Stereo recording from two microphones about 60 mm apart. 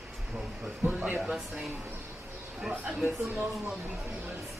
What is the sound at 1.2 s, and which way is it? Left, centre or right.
Speech, centre.